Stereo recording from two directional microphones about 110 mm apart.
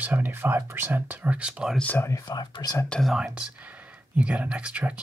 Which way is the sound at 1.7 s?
15° left (ahead or behind).